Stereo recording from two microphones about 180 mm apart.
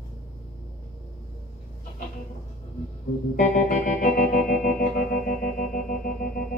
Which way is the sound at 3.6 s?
45° left (ahead or behind).